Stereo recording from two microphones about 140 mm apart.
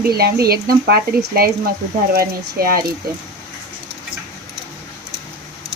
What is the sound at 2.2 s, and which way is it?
Speech, 90° right.